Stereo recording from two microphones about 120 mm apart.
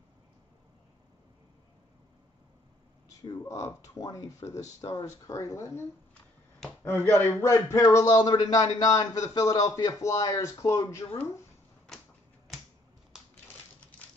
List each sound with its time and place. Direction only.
3.2 s speech: 25° left (ahead or behind)